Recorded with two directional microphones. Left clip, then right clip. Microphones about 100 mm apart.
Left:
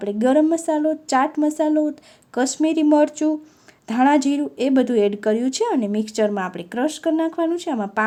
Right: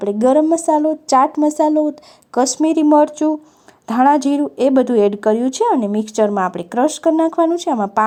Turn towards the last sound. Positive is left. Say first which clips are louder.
# right 7 dB
turn(degrees=-40)  # may be behind; listen again after turning